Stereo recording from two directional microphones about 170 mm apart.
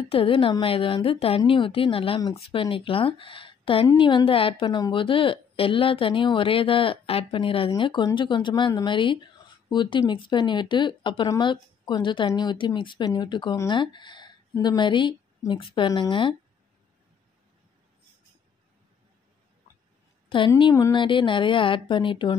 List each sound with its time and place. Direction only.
0.1 s a woman's voice: 30° left (ahead or behind)
20.2 s speech: 30° left (ahead or behind)